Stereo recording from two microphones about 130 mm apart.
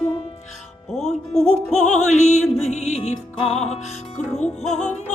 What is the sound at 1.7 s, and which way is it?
Music, 60° left (ahead or behind).